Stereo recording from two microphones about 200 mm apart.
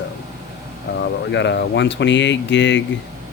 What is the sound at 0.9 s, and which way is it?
Speech, 60° left (ahead or behind).